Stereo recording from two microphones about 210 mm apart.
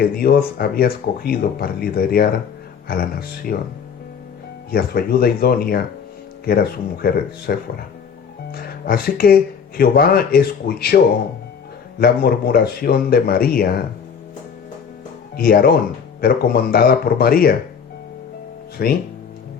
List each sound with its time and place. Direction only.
0.0 s speech: 45° left (ahead or behind)
4.7 s speech: 45° left (ahead or behind)
8.5 s speech: 45° left (ahead or behind)
15.4 s speech: 45° left (ahead or behind)
18.8 s speech: 45° left (ahead or behind)